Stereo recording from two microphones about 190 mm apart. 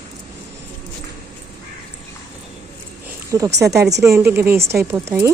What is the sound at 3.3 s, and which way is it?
A woman's voice, 15° right (ahead or behind).